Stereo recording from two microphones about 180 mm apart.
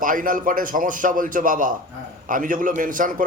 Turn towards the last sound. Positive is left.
turn(degrees=-50)  # may be behind; listen again after turning